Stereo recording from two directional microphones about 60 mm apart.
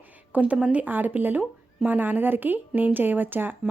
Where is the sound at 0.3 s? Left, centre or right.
Right.